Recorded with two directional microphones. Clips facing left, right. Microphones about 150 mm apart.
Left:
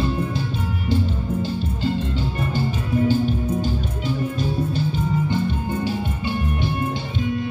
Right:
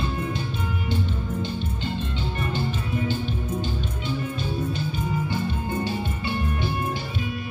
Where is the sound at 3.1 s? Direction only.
40° left (ahead or behind).